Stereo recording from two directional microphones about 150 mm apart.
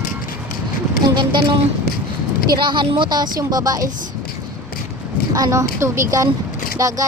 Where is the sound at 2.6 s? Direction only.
30° right (ahead or behind).